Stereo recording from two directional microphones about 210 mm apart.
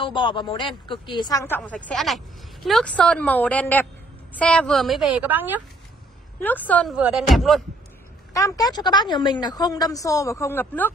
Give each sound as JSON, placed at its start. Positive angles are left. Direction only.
{"t": 0.0, "sound": "a woman's voice", "side_deg": 25}
{"t": 6.4, "sound": "a woman's voice", "side_deg": 10}
{"t": 8.3, "sound": "a woman's voice", "side_deg": 15}